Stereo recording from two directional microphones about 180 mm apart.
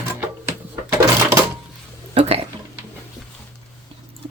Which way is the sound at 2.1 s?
30° right (ahead or behind).